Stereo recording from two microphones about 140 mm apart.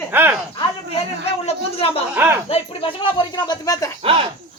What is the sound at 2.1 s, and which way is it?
Speech, 15° right (ahead or behind).